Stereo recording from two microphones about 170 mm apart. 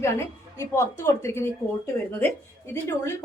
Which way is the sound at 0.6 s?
15° left (ahead or behind).